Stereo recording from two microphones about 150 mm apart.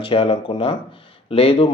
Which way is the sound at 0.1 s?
35° left (ahead or behind).